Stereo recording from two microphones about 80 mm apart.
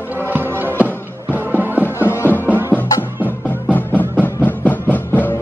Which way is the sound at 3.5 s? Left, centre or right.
Left.